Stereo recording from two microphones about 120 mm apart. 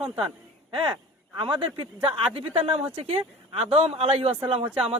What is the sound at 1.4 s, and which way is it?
A man's voice, 40° right (ahead or behind).